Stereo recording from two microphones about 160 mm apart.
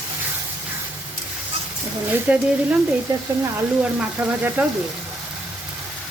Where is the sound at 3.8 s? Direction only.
10° right (ahead or behind).